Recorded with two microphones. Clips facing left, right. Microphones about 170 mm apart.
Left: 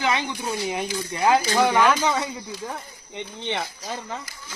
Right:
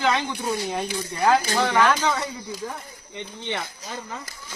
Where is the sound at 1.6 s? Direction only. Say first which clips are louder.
Left 1 dB; 10° left (ahead or behind).